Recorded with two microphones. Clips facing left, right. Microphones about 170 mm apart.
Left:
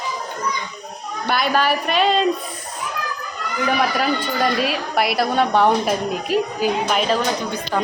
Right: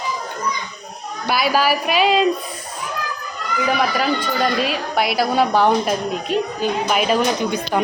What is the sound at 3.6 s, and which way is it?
A woman's voice, centre (ahead or behind).